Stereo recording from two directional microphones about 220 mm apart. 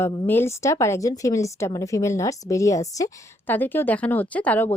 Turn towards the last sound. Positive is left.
turn(degrees=5)  # may be behind; listen again after turning